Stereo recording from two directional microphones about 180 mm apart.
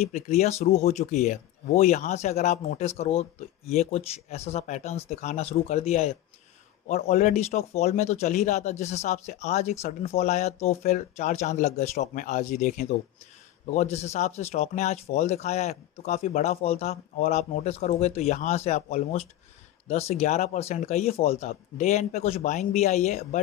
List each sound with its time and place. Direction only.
0.0 s speech: 40° left (ahead or behind)